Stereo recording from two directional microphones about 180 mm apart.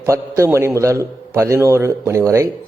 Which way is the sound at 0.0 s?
15° right (ahead or behind).